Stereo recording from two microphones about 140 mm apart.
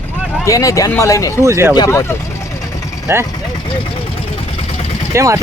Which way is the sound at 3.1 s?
15° right (ahead or behind).